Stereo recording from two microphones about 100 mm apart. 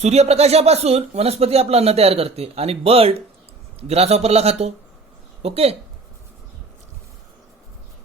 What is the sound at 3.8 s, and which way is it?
Speech, 90° right.